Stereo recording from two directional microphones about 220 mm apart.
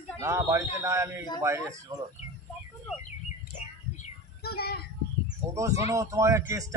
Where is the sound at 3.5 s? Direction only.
40° left (ahead or behind).